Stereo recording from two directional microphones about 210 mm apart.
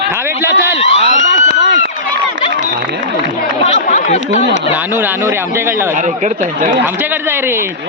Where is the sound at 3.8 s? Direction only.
40° left (ahead or behind).